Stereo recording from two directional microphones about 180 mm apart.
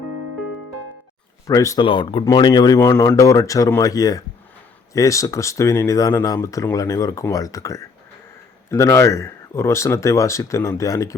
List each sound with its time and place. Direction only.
1.5 s speech: 20° left (ahead or behind)